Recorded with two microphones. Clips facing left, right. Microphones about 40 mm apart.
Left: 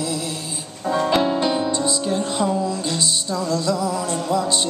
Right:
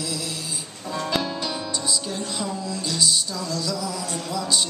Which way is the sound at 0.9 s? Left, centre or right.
Left.